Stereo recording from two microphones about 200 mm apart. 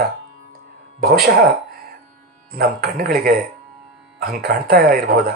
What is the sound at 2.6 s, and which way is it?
Speech, 50° right (ahead or behind).